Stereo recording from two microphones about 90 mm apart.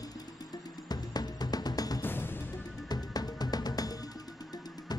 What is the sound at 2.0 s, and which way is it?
Music, 25° left (ahead or behind).